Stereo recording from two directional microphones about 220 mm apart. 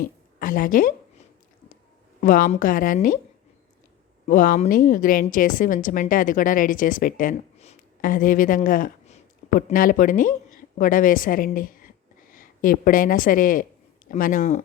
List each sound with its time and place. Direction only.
0.0 s a woman's voice: 40° left (ahead or behind)
2.2 s a woman's voice: 40° left (ahead or behind)
4.3 s a woman's voice: 35° left (ahead or behind)